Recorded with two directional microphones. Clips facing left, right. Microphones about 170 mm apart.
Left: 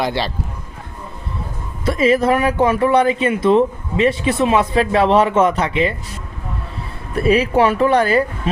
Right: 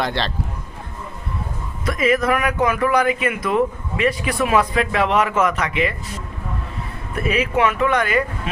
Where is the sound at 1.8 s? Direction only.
30° left (ahead or behind).